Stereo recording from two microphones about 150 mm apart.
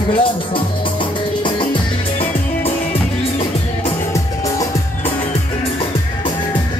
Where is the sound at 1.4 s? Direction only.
30° left (ahead or behind).